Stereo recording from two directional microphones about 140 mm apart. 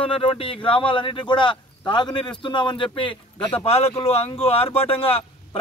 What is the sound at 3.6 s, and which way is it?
Speech, 45° left (ahead or behind).